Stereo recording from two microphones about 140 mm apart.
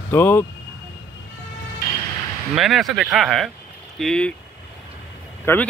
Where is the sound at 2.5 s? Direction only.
Centre (ahead or behind).